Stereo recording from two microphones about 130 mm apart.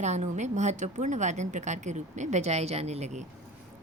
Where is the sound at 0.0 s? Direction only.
65° right (ahead or behind).